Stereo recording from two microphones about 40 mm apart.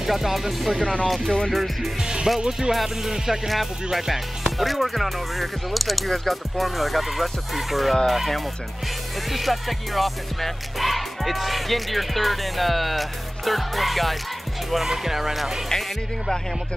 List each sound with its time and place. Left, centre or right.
0.0 s music: centre
14.7 s speech: centre